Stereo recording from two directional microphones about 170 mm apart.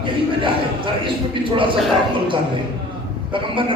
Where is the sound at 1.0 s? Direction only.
30° right (ahead or behind).